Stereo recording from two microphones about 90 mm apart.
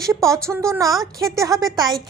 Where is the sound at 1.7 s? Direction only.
50° right (ahead or behind).